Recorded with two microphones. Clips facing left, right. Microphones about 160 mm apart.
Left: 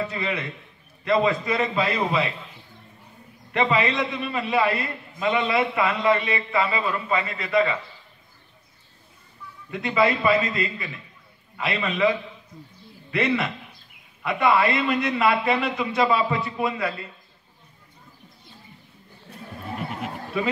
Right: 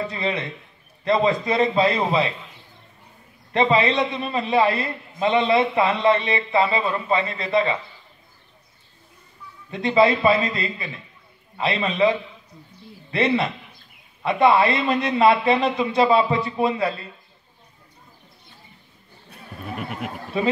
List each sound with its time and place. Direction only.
0.0 s a man's voice: 30° right (ahead or behind)
3.5 s a man's voice: 30° right (ahead or behind)
9.7 s a man's voice: 30° right (ahead or behind)
20.4 s a man's voice: 30° right (ahead or behind)